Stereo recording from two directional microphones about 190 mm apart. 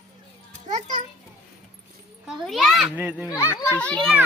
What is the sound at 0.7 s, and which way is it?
Speech, 40° right (ahead or behind).